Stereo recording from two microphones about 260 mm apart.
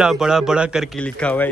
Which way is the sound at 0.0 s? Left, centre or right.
Centre.